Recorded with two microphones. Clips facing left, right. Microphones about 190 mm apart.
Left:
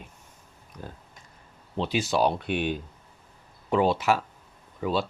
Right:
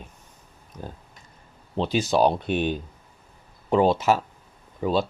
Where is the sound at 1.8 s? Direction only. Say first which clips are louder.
Right 4 dB; 40° right (ahead or behind).